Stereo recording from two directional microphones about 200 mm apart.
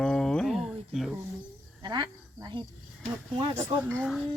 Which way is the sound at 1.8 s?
20° right (ahead or behind).